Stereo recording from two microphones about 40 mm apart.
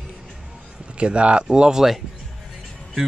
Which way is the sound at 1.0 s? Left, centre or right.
Right.